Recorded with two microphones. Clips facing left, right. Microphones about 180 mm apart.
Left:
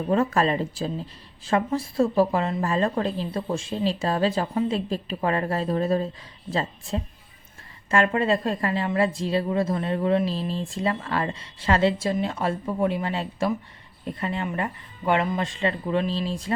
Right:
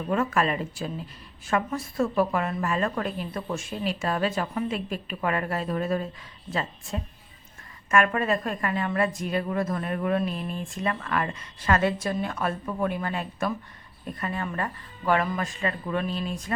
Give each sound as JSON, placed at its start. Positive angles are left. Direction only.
{"t": 0.0, "sound": "a woman's voice", "side_deg": 35}